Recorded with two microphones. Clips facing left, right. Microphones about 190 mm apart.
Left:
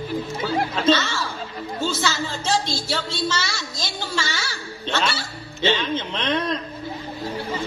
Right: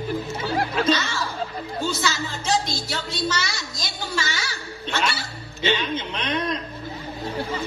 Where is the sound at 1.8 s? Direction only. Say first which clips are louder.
Left 2 dB; 25° left (ahead or behind).